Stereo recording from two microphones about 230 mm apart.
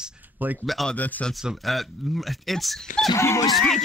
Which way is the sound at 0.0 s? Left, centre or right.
Centre.